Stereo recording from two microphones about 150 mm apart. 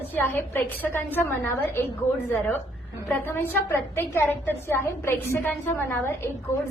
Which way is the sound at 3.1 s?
15° left (ahead or behind).